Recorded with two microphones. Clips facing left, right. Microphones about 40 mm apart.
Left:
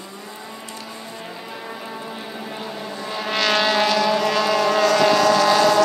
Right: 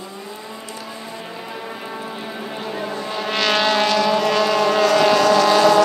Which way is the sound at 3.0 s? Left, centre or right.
Centre.